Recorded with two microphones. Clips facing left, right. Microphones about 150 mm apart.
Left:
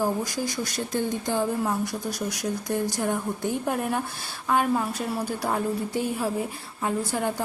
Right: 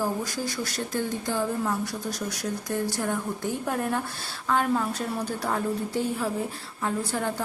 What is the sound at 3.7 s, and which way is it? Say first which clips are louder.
Speech: left 1 dB; 15° left (ahead or behind).